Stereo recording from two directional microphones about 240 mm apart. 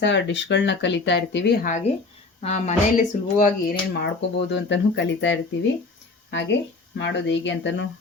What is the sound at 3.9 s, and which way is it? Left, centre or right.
Speech, left.